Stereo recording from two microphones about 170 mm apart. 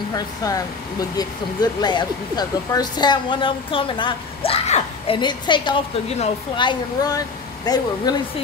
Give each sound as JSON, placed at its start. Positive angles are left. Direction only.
{"t": 0.1, "sound": "speech", "side_deg": 20}